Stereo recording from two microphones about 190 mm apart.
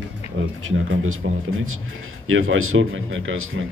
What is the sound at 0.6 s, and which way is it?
Speech, 90° right.